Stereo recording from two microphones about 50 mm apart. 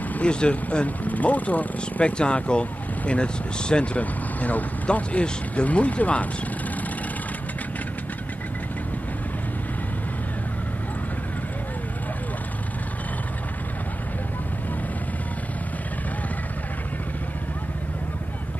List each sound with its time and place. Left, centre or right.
0.1 s speech: left